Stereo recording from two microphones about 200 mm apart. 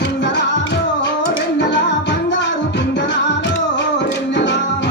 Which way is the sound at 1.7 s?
60° left (ahead or behind).